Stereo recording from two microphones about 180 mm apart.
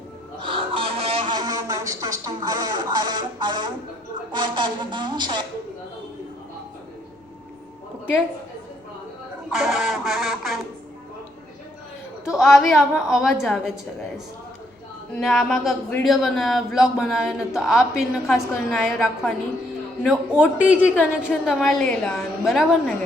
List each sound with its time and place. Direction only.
0.3 s a sound: 30° right (ahead or behind)
4.3 s a woman's voice: 25° right (ahead or behind)
9.5 s a man's voice: 5° right (ahead or behind)
12.2 s a man's voice: centre (ahead or behind)
15.1 s a man's voice: 5° left (ahead or behind)